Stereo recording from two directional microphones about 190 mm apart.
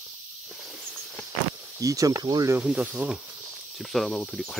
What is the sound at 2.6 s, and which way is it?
Speech, 5° right (ahead or behind).